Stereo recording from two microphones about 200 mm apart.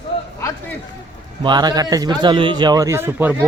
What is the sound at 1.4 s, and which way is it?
A man's voice, 20° right (ahead or behind).